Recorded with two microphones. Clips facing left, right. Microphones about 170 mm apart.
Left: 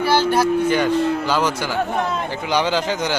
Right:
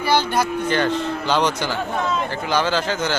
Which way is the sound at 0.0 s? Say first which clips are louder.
Left 3 dB; 5° left (ahead or behind).